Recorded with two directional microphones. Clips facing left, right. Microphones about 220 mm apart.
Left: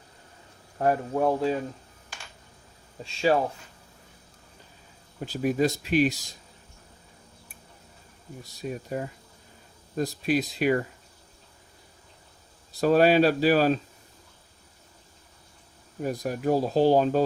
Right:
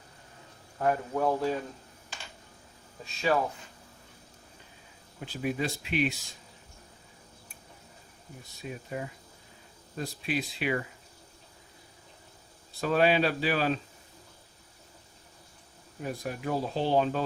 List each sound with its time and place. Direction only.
0.8 s speech: 25° left (ahead or behind)
3.0 s speech: 30° left (ahead or behind)
5.2 s speech: 40° left (ahead or behind)
8.6 s speech: 40° left (ahead or behind)
12.8 s speech: 40° left (ahead or behind)
16.0 s speech: 45° left (ahead or behind)